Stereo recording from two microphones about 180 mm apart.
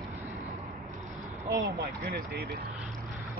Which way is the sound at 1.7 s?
60° right (ahead or behind).